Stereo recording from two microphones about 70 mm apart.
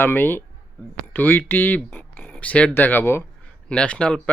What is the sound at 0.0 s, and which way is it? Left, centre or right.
Speech, left.